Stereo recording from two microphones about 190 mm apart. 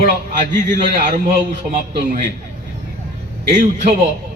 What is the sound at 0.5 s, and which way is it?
Speech, 45° right (ahead or behind).